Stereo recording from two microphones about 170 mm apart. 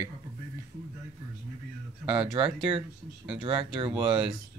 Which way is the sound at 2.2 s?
30° right (ahead or behind).